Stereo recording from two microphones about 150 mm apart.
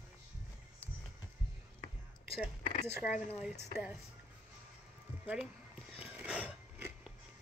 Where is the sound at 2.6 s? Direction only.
60° left (ahead or behind).